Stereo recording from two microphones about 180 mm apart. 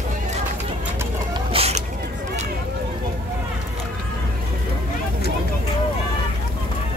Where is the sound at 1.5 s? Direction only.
35° right (ahead or behind).